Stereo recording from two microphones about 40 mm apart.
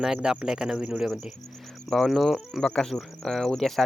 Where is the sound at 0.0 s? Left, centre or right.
Centre.